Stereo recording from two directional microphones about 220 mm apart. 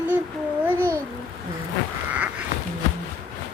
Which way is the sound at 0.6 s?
10° right (ahead or behind).